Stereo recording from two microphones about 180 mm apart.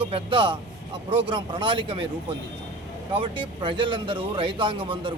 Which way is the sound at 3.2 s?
25° right (ahead or behind).